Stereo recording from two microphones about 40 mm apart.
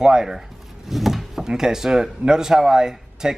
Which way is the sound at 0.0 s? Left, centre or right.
Centre.